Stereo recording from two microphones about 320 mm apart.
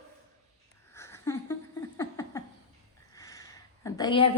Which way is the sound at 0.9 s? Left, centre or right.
Centre.